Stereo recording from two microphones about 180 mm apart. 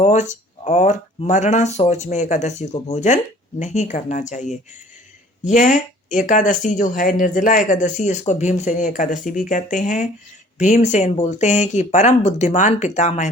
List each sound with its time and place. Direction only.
0.0 s speech: 40° left (ahead or behind)